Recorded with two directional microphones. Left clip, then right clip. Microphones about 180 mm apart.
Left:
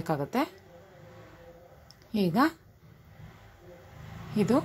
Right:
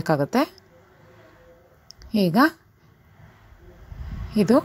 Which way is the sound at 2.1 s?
30° right (ahead or behind).